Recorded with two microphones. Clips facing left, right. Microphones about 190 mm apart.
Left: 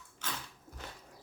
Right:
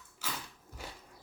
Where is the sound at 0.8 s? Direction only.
10° right (ahead or behind).